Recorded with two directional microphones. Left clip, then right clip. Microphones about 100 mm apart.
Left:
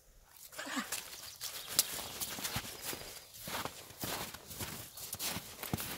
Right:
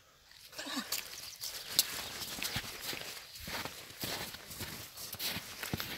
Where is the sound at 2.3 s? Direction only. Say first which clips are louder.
Right 3 dB; centre (ahead or behind).